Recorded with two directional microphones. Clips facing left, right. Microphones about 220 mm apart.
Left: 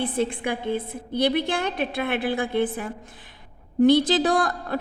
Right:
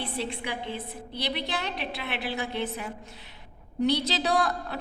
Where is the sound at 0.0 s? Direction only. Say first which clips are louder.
Left 8 dB; 50° left (ahead or behind).